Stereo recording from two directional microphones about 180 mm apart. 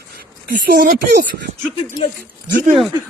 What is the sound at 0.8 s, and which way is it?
Speech, 45° right (ahead or behind).